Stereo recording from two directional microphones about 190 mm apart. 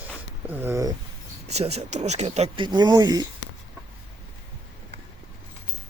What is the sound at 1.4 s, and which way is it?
Speech, 35° right (ahead or behind).